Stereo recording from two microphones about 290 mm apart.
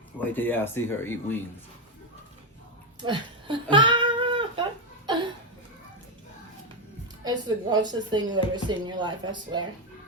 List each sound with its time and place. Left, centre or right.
0.2 s speech: centre
3.0 s cat: centre
5.0 s laughter: centre
7.3 s speech: centre